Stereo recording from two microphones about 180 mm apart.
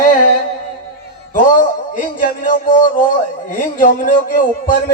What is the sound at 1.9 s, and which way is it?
A man's voice, 50° left (ahead or behind).